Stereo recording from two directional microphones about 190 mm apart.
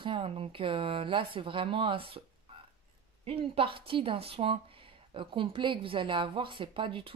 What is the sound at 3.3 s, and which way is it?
A woman's voice, 30° right (ahead or behind).